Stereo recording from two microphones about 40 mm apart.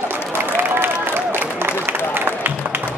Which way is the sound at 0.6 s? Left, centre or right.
Right.